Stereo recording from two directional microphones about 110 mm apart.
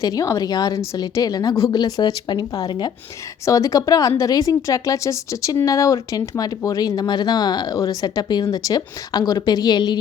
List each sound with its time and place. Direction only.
0.0 s speech: 30° left (ahead or behind)